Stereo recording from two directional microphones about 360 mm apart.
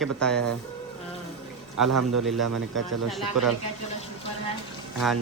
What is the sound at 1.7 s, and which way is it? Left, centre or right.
Speech, right.